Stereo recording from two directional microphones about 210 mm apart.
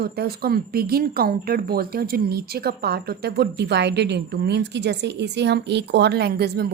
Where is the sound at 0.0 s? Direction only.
45° right (ahead or behind).